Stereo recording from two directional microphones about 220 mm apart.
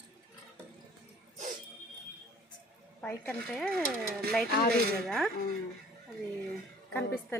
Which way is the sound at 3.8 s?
45° right (ahead or behind).